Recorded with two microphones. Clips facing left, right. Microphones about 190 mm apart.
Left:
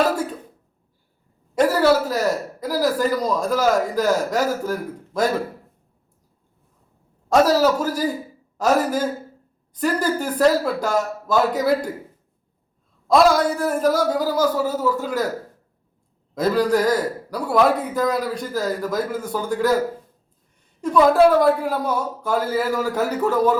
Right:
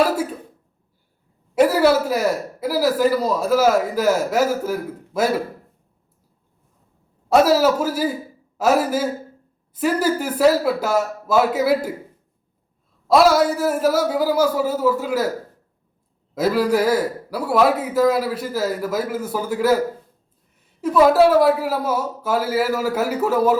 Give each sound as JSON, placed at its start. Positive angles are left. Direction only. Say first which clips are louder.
{"t": 1.5, "sound": "speech", "louder": "right 1 dB", "side_deg": -10}
{"t": 7.3, "sound": "speech", "louder": "right 1 dB", "side_deg": -10}
{"t": 13.1, "sound": "speech", "louder": "right 1 dB", "side_deg": -5}
{"t": 16.3, "sound": "speech", "louder": "even", "side_deg": -5}
{"t": 20.8, "sound": "a man's voice", "louder": "right 1 dB", "side_deg": -5}